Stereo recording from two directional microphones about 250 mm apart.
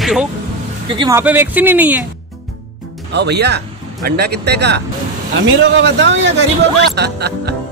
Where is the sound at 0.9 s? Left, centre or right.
Centre.